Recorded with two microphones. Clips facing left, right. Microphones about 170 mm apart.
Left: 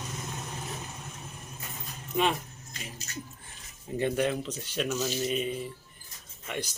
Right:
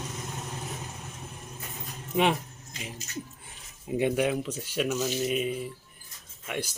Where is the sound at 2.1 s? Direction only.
15° right (ahead or behind).